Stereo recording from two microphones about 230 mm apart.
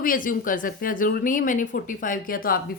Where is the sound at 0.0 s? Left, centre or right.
Left.